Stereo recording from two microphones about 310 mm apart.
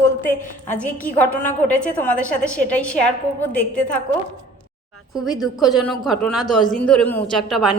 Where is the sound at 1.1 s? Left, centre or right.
Centre.